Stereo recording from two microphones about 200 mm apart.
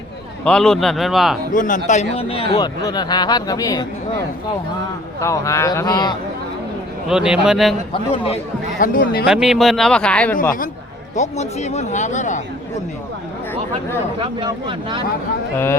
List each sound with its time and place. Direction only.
0.4 s speech: 5° left (ahead or behind)
1.5 s a man's voice: 40° left (ahead or behind); by 3.8 s 20° left (ahead or behind)
5.2 s a man's voice: 15° left (ahead or behind)
7.1 s speech: 5° right (ahead or behind)
7.9 s a man's voice: 25° left (ahead or behind)
8.8 s speech: 45° left (ahead or behind)
9.2 s speech: centre (ahead or behind)
11.1 s speech: 35° left (ahead or behind)
14.2 s speech: 25° right (ahead or behind)